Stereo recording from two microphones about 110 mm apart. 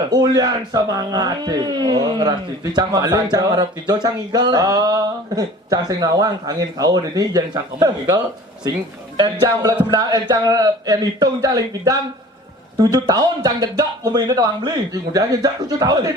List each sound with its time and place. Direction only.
0.1 s speech: 35° right (ahead or behind)